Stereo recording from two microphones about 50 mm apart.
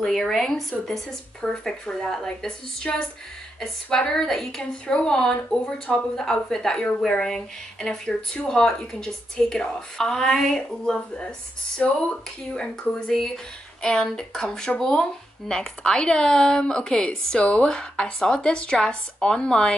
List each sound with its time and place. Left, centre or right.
0.0 s a woman's voice: centre
2.9 s speech: left
4.1 s a woman's voice: centre
4.8 s speech: left
6.1 s a woman's voice: centre
13.8 s a woman's voice: centre
17.4 s speech: left
17.6 s a woman's voice: centre